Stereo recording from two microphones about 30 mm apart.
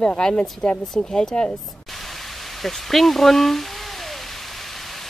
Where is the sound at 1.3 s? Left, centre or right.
Left.